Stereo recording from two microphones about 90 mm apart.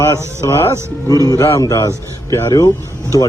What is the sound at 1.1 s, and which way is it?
A man's voice, 40° left (ahead or behind).